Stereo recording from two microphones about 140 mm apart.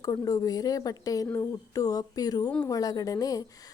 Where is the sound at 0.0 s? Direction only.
25° left (ahead or behind).